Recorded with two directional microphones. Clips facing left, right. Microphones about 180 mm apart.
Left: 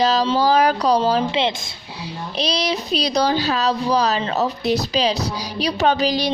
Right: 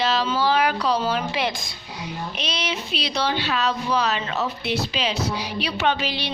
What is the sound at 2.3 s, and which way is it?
Speech, 35° left (ahead or behind).